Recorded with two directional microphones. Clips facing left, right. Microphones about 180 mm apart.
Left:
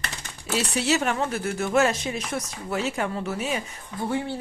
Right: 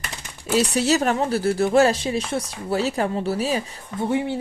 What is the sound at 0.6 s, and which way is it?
Speech, 40° right (ahead or behind).